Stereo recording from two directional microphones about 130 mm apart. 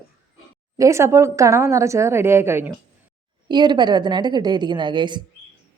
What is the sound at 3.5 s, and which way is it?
Speech, 35° right (ahead or behind).